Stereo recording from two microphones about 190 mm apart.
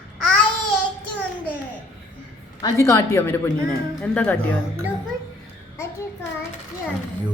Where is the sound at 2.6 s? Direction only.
20° left (ahead or behind).